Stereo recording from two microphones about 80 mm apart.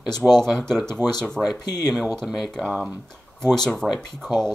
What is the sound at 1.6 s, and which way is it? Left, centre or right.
Speech, left.